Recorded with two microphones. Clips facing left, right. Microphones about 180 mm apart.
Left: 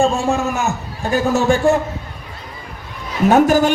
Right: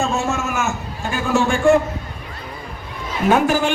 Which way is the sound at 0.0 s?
35° left (ahead or behind).